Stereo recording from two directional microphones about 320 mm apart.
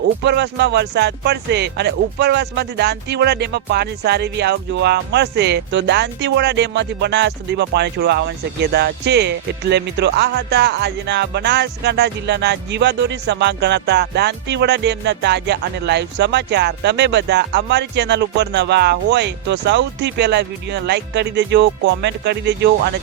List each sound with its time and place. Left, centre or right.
0.3 s speech: right